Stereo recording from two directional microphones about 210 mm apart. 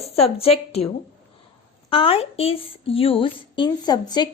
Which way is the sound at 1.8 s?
25° left (ahead or behind).